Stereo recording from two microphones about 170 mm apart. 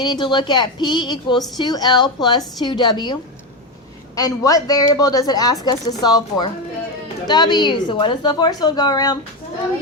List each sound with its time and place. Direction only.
0.0 s a woman's voice: 25° left (ahead or behind)